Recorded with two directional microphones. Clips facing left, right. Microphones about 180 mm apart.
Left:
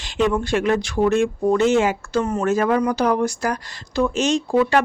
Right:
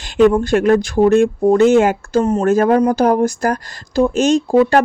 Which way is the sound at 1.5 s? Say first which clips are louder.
Right 6 dB; 55° right (ahead or behind).